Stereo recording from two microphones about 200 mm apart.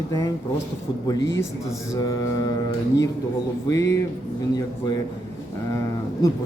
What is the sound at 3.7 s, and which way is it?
Speech, 15° left (ahead or behind).